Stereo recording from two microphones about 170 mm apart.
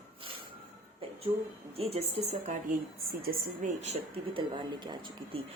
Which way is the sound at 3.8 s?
35° right (ahead or behind).